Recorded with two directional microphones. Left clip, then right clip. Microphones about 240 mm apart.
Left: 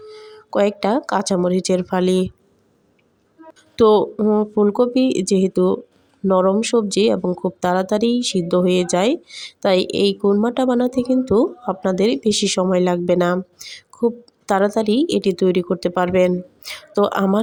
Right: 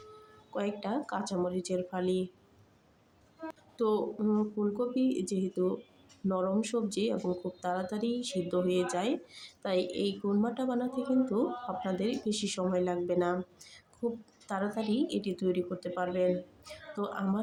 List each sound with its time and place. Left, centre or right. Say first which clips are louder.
0.5 s speech: left 17 dB; left
3.8 s speech: left 17 dB; left